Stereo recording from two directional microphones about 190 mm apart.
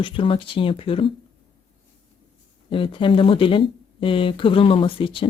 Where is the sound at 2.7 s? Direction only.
25° left (ahead or behind).